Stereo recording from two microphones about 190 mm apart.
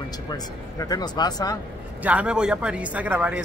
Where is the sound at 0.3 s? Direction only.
20° left (ahead or behind).